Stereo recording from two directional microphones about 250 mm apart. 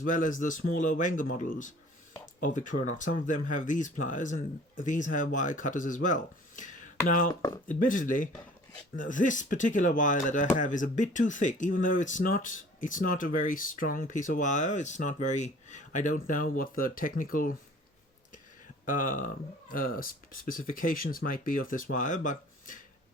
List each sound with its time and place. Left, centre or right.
0.0 s speech: left
18.9 s speech: left